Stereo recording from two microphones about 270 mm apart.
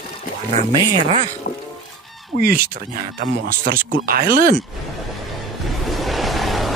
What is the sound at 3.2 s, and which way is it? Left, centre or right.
Speech, right.